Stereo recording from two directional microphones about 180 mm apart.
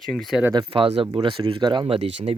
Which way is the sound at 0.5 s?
30° right (ahead or behind).